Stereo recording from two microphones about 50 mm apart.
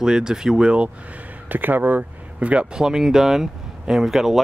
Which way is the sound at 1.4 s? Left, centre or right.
Right.